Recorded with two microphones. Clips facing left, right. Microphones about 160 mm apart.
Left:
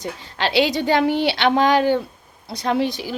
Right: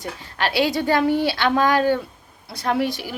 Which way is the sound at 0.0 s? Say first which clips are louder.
Left 1 dB; 20° left (ahead or behind).